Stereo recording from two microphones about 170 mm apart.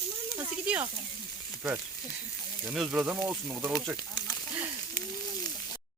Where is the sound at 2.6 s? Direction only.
5° right (ahead or behind).